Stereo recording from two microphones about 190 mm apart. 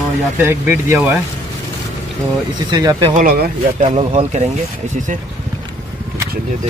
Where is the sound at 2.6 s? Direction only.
20° right (ahead or behind).